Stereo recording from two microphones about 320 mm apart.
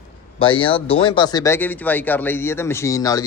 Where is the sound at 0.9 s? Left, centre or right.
Centre.